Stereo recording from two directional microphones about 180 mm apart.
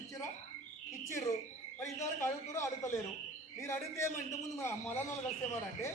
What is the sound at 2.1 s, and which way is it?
A man's voice, 15° left (ahead or behind).